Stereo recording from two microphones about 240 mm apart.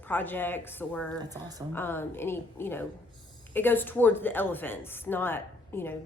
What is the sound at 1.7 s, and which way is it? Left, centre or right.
A woman's voice, centre.